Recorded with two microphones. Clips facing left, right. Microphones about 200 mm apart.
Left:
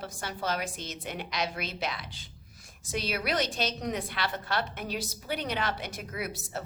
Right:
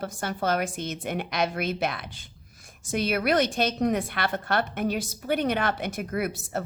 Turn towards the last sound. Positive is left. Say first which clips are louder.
# right 7 dB
turn(degrees=-55)  # may be behind; listen again after turning